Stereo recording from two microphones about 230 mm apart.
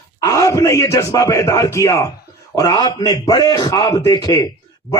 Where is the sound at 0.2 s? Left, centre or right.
Centre.